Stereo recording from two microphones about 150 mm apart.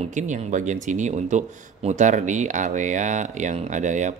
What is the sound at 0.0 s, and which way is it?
Speech, 55° right (ahead or behind).